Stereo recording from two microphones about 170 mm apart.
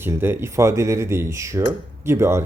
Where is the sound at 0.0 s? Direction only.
15° right (ahead or behind).